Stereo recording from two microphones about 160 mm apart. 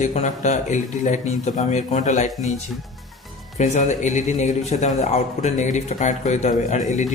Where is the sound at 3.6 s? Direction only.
50° left (ahead or behind).